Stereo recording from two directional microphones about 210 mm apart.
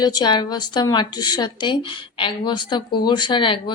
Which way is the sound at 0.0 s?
20° left (ahead or behind).